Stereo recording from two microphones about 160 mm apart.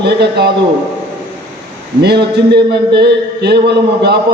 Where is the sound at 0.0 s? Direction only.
90° right.